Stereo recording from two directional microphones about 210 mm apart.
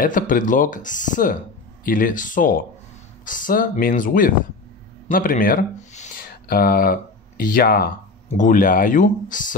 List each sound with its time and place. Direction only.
0.0 s speech: 40° left (ahead or behind)